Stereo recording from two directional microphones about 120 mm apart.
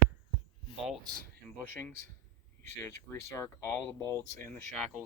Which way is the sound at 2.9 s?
20° left (ahead or behind).